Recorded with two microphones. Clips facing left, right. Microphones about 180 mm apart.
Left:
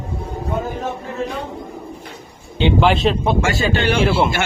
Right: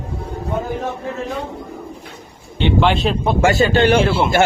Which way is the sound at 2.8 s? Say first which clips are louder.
Left 1 dB; centre (ahead or behind).